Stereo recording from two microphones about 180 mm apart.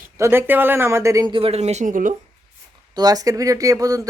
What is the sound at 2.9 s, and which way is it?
Speech, 20° right (ahead or behind).